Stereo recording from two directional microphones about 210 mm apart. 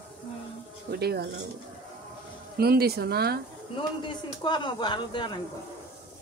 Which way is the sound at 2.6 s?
50° right (ahead or behind).